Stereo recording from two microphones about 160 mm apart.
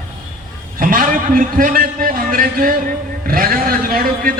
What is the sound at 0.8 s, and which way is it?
A man's voice, 60° right (ahead or behind).